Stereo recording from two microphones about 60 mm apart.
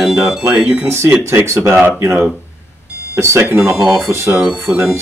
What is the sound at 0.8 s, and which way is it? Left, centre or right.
Speech, right.